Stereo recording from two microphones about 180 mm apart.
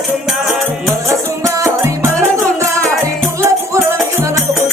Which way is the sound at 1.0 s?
15° right (ahead or behind).